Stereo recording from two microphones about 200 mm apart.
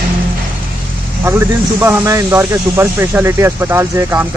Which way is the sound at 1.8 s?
10° right (ahead or behind).